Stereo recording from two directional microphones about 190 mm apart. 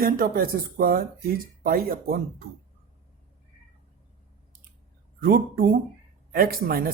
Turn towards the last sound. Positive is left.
turn(degrees=-50)  # may be behind; listen again after turning